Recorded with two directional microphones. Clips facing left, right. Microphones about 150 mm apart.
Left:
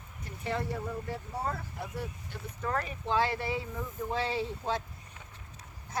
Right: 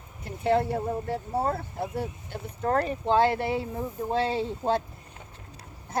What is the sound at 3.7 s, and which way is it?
Speech, 40° right (ahead or behind).